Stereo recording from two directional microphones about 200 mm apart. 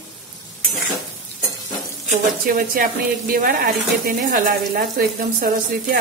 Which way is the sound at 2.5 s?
45° right (ahead or behind).